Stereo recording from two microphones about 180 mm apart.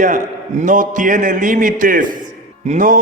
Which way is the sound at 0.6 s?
45° right (ahead or behind).